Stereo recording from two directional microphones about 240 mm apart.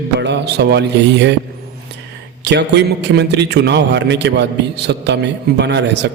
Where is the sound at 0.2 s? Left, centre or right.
Right.